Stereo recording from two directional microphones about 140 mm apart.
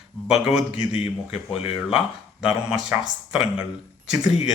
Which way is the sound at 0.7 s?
45° left (ahead or behind).